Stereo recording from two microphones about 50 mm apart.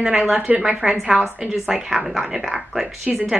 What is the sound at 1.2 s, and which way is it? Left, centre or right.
Speech, right.